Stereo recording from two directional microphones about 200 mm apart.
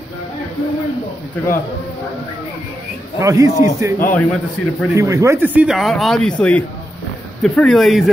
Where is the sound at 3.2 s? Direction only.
15° right (ahead or behind).